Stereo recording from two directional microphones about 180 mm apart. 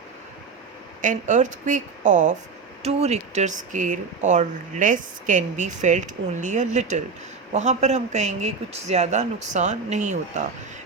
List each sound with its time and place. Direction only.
1.0 s a woman's voice: 45° right (ahead or behind)